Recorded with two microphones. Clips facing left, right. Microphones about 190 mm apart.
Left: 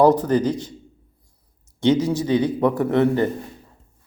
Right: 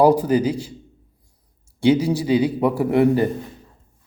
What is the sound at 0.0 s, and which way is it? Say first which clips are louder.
Speech: even; 10° right (ahead or behind).